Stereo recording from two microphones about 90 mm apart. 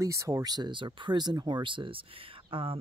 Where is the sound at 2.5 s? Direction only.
90° right.